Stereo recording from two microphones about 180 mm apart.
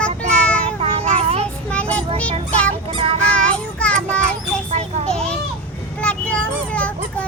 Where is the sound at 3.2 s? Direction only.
5° left (ahead or behind).